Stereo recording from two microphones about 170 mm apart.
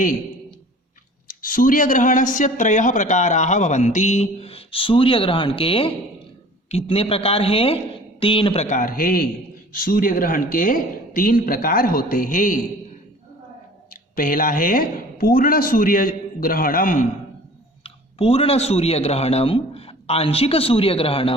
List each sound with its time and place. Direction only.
1.3 s a man's voice: 55° left (ahead or behind); by 8.6 s 30° left (ahead or behind)
8.6 s a man's voice: 50° left (ahead or behind)
13.9 s a man's voice: 55° left (ahead or behind)
17.8 s speech: 35° left (ahead or behind)